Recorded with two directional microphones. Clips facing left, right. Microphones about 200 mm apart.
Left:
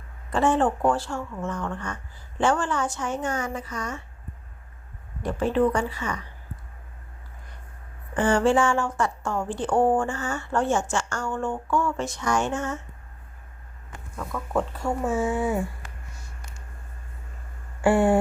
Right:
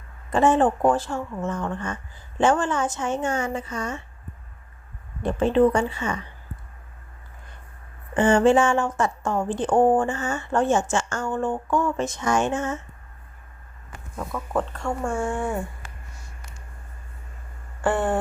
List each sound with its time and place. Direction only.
0.3 s speech: 20° right (ahead or behind)
5.2 s speech: 25° right (ahead or behind)
8.1 s speech: 25° right (ahead or behind)
14.3 s speech: centre (ahead or behind)
17.8 s a sound: 10° left (ahead or behind)